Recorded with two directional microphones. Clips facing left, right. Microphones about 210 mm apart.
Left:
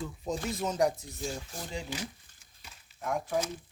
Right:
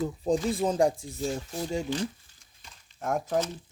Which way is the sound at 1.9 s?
5° left (ahead or behind).